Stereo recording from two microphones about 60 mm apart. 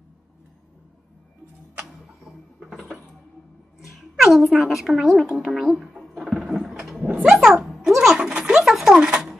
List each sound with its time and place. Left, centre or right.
2.2 s a sound: centre
3.9 s music: centre
5.2 s speech: centre
5.6 s music: centre
6.3 s a sound: centre
7.1 s cat: right
7.3 s speech: centre
7.6 s music: centre
8.2 s a sound: centre